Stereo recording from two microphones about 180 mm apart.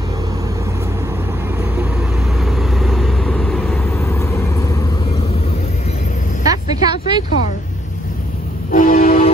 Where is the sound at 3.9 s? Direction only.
15° left (ahead or behind).